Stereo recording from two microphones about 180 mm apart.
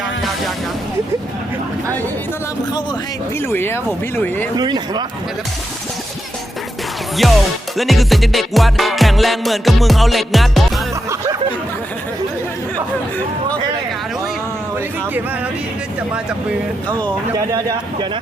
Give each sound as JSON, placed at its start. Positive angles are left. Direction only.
{"t": 3.5, "sound": "speech", "side_deg": 10}
{"t": 4.5, "sound": "speech", "side_deg": -25}
{"t": 7.2, "sound": "music", "side_deg": 0}
{"t": 17.3, "sound": "speech", "side_deg": -20}